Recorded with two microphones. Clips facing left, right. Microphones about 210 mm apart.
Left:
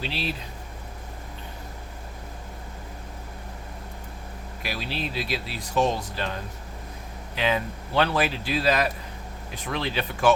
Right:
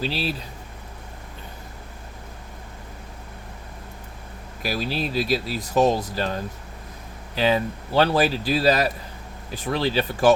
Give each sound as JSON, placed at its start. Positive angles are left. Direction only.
{"t": 0.0, "sound": "speech", "side_deg": -35}
{"t": 4.6, "sound": "speech", "side_deg": -40}